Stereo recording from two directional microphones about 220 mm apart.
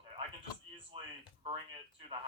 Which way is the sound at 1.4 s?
20° right (ahead or behind).